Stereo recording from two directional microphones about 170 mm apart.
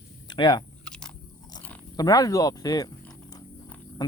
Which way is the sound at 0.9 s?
5° left (ahead or behind).